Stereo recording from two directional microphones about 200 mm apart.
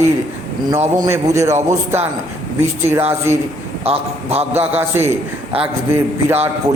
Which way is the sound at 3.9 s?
30° right (ahead or behind).